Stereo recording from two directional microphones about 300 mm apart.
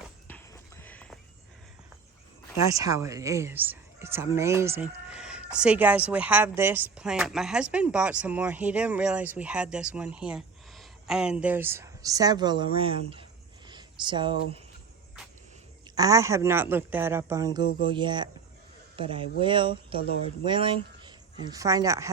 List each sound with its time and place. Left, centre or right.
0.3 s horse: centre
2.6 s speech: centre
13.7 s a sound: centre
16.0 s speech: centre
20.0 s speech: left
20.4 s speech: centre